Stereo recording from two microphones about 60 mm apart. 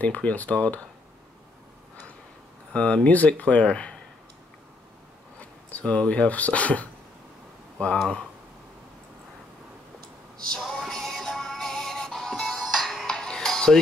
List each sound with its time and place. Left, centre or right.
0.0 s speech: left
2.7 s speech: centre
5.7 s speech: left
7.9 s speech: centre
10.7 s music: centre
13.0 s music: centre